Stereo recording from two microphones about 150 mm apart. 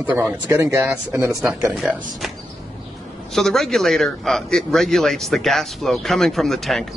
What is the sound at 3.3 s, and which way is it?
A man's voice, centre (ahead or behind).